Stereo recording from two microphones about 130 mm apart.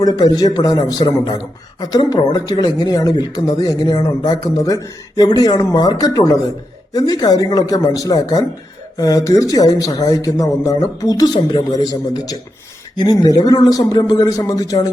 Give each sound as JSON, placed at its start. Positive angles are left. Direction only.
{"t": 0.0, "sound": "a woman's voice", "side_deg": 30}